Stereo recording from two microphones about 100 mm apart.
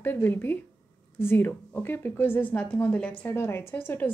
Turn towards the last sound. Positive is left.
turn(degrees=20)  # may be behind; listen again after turning